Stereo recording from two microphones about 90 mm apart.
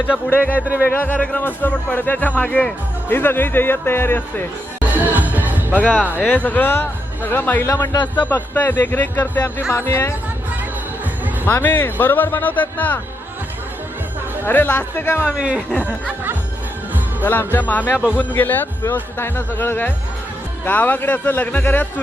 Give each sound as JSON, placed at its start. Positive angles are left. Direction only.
{"t": 0.0, "sound": "a man's voice", "side_deg": 20}
{"t": 4.9, "sound": "music", "side_deg": -20}
{"t": 5.9, "sound": "speech", "side_deg": -15}
{"t": 6.1, "sound": "a man's voice", "side_deg": 15}
{"t": 9.7, "sound": "speech", "side_deg": 30}
{"t": 11.4, "sound": "a man's voice", "side_deg": 20}
{"t": 14.4, "sound": "a man's voice", "side_deg": 20}
{"t": 15.3, "sound": "speech", "side_deg": -10}
{"t": 17.2, "sound": "a man's voice", "side_deg": 20}